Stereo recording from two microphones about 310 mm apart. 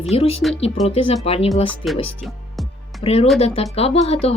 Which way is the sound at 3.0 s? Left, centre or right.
Centre.